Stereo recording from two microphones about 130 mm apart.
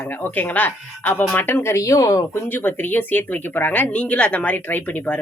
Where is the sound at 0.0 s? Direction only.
15° left (ahead or behind).